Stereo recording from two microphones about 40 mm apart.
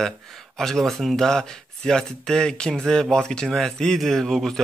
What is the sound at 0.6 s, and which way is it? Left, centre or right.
Speech, centre.